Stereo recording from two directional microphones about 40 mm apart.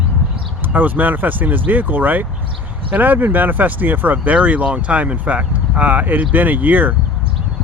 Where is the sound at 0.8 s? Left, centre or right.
Right.